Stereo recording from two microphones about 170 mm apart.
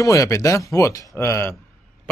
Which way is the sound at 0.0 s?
20° left (ahead or behind).